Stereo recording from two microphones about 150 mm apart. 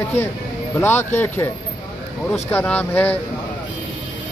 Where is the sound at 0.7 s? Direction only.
15° left (ahead or behind).